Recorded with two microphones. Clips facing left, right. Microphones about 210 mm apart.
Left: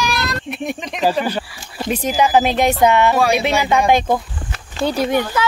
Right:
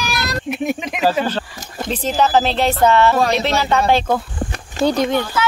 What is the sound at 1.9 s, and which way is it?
Speech, 10° left (ahead or behind).